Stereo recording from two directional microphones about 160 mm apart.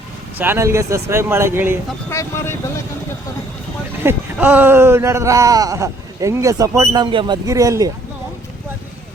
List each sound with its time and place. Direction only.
0.3 s speech: 15° right (ahead or behind)
2.0 s speech: 15° left (ahead or behind)
4.0 s speech: 10° right (ahead or behind)